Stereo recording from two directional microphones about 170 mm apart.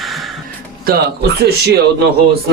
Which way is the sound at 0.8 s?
70° right (ahead or behind).